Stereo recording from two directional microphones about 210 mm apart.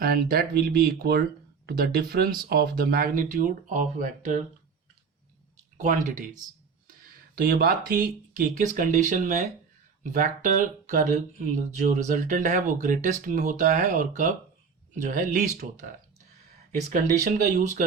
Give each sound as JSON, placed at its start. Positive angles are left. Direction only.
{"t": 0.0, "sound": "speech", "side_deg": -45}
{"t": 5.7, "sound": "speech", "side_deg": -35}
{"t": 7.3, "sound": "speech", "side_deg": -45}
{"t": 16.9, "sound": "speech", "side_deg": -40}